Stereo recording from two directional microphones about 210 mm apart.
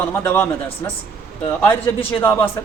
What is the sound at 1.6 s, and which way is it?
Speech, 10° left (ahead or behind).